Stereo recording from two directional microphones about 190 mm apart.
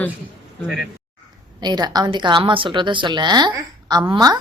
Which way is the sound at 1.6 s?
20° right (ahead or behind).